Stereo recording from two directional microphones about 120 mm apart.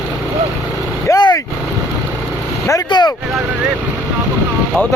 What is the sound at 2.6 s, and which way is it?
Speech, 35° left (ahead or behind).